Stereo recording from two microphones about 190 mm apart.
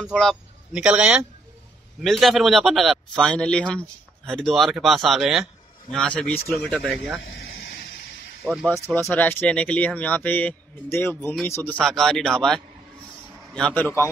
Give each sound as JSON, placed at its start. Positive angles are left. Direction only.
{"t": 0.0, "sound": "speech", "side_deg": 0}
{"t": 7.2, "sound": "a sound", "side_deg": 55}
{"t": 8.5, "sound": "speech", "side_deg": 0}